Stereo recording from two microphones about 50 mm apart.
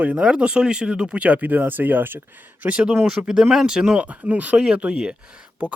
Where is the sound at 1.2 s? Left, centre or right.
Right.